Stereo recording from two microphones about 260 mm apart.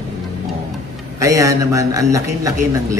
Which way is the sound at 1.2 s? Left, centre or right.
Centre.